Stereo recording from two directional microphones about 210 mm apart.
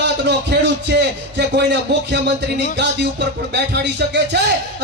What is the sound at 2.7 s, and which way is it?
Music, 55° right (ahead or behind).